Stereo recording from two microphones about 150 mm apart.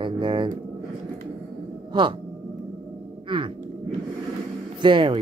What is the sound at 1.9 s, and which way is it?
Speech, 35° right (ahead or behind).